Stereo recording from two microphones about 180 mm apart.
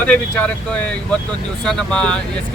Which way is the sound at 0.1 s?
5° left (ahead or behind).